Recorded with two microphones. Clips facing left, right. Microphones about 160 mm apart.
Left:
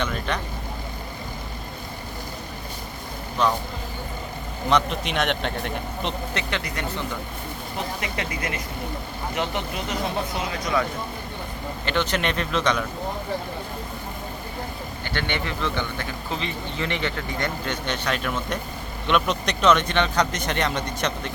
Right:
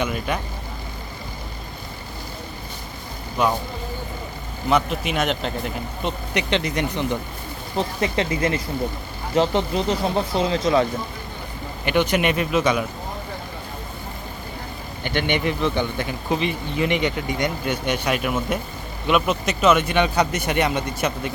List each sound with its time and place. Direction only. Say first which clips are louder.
0.0 s speech: right 3 dB; 10° right (ahead or behind)
3.4 s speech: right 1 dB; 10° right (ahead or behind)
4.7 s a man's voice: right 2 dB; 5° right (ahead or behind)
6.3 s speech: right 6 dB; 20° right (ahead or behind)
11.9 s speech: right 5 dB; 10° right (ahead or behind)
15.0 s speech: right 6 dB; 15° right (ahead or behind)